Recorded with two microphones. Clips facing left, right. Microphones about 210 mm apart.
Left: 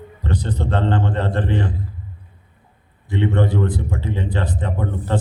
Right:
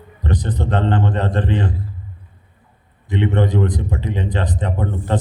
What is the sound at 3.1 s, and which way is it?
A man's voice, 20° right (ahead or behind).